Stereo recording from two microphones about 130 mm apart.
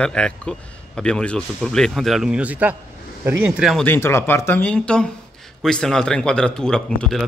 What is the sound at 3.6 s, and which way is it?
Speech, centre (ahead or behind).